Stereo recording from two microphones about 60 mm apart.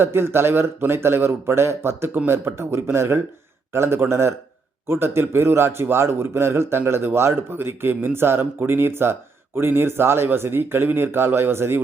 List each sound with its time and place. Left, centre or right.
0.0 s a man's voice: right